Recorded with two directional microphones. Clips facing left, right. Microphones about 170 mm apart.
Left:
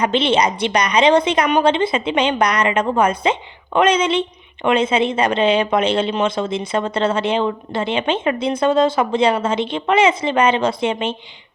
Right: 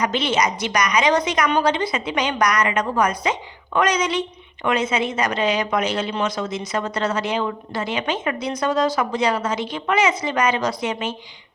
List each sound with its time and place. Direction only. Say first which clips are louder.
0.0 s a woman's voice: left 4 dB; 25° left (ahead or behind)